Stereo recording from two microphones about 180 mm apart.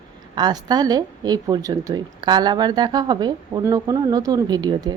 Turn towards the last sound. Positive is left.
turn(degrees=-20)  # may be behind; listen again after turning